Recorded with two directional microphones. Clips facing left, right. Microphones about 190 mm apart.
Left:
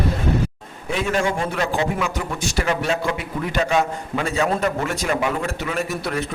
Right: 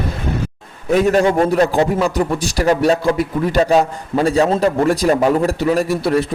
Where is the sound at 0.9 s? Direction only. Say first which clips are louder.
Right 8 dB; 40° right (ahead or behind).